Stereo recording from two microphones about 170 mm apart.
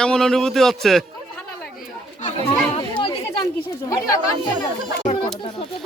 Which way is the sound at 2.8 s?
30° left (ahead or behind).